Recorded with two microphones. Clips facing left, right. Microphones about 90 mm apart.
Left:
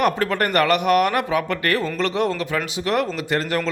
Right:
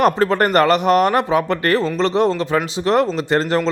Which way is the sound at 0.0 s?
30° right (ahead or behind).